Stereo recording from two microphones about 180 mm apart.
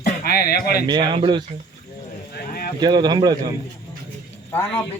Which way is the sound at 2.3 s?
55° left (ahead or behind).